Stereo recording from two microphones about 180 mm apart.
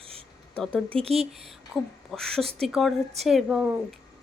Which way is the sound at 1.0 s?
35° right (ahead or behind).